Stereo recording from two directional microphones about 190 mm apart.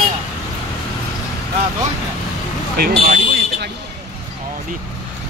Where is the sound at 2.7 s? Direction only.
50° right (ahead or behind).